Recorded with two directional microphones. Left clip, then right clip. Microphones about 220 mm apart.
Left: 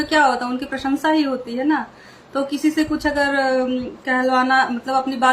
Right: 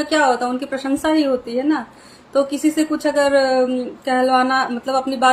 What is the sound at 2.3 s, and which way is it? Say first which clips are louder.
Speech: right 3 dB; 15° left (ahead or behind).